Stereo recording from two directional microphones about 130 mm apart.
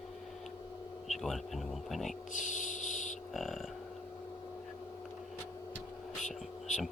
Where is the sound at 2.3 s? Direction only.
70° left (ahead or behind).